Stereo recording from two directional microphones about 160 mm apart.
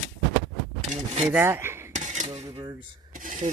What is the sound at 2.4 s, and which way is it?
Speech, 25° right (ahead or behind).